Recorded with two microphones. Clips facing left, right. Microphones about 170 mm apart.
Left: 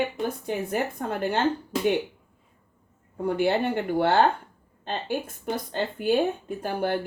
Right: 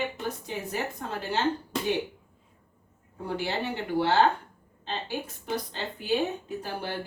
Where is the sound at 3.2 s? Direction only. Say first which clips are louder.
Left 7 dB; 55° left (ahead or behind).